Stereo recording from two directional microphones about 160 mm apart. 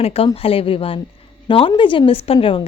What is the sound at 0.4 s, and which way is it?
Speech, 35° left (ahead or behind).